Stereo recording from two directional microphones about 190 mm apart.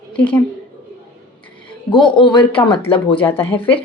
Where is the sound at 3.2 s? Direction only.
10° left (ahead or behind).